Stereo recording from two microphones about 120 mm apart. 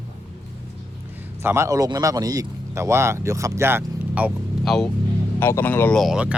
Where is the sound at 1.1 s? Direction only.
15° right (ahead or behind).